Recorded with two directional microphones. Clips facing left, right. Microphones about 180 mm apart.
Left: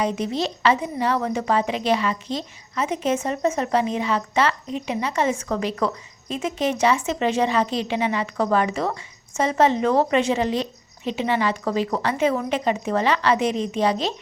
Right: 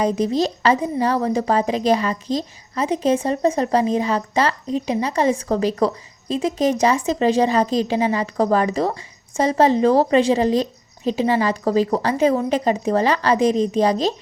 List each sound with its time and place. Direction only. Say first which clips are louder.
0.0 s a woman's voice: right 5 dB; 40° right (ahead or behind)